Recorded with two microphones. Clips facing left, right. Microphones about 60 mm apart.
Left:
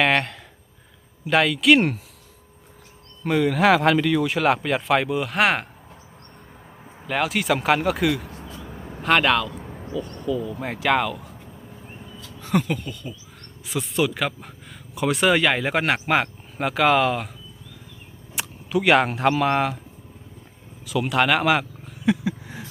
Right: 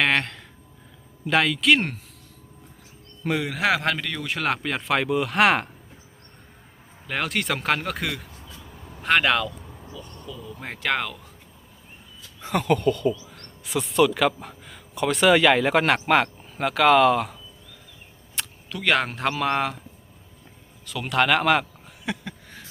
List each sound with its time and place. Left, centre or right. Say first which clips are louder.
0.0 s a sound: left 2 dB; centre
1.2 s speech: left 2 dB; centre
3.2 s speech: left 5 dB; centre
7.1 s speech: left 4 dB; centre
9.5 s a sound: left 9 dB; left
10.6 s speech: left 3 dB; centre
12.5 s speech: right 3 dB; centre
18.3 s speech: left 9 dB; centre
20.8 s a sound: left 2 dB; centre